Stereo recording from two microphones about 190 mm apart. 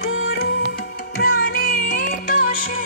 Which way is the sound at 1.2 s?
55° left (ahead or behind).